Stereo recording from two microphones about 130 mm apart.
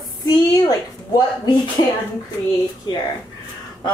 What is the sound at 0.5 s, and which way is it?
A woman's voice, 25° left (ahead or behind).